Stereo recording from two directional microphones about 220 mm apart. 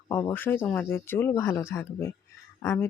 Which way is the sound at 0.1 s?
15° left (ahead or behind).